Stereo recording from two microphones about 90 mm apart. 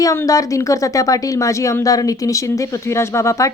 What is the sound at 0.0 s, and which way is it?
A woman's voice, 35° left (ahead or behind).